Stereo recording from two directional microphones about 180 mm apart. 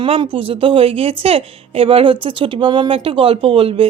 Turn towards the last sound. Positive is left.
turn(degrees=-30)  # may be behind; listen again after turning